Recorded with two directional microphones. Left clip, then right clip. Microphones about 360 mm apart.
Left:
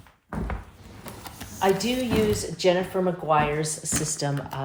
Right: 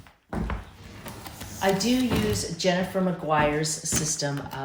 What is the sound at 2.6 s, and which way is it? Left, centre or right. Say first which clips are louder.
Speech: left 3 dB; centre.